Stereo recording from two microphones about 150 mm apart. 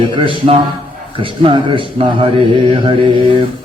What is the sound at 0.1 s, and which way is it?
Speech, 35° right (ahead or behind).